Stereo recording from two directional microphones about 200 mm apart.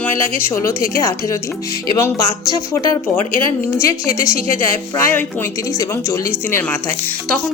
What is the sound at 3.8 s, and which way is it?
A woman's voice, 15° left (ahead or behind).